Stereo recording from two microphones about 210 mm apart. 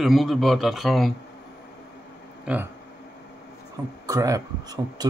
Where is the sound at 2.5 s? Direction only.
5° right (ahead or behind).